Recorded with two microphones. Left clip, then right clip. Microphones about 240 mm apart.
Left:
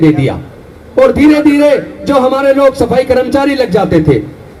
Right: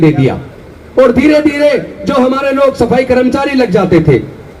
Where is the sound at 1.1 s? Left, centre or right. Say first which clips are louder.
Left 1 dB; left.